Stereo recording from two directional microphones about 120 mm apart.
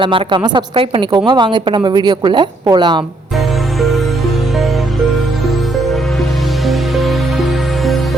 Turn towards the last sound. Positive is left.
turn(degrees=0)  # may be behind; listen again after turning